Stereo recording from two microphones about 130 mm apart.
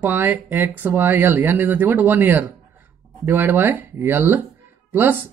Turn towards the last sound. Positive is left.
turn(degrees=-15)  # may be behind; listen again after turning